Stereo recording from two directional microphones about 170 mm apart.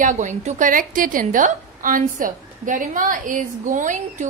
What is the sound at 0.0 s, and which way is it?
A woman's voice, 45° right (ahead or behind).